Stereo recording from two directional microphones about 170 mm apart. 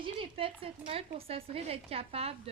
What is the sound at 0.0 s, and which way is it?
Speech, 30° right (ahead or behind).